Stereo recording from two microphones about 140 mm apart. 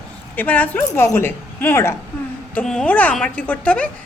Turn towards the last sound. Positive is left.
turn(degrees=10)  # may be behind; listen again after turning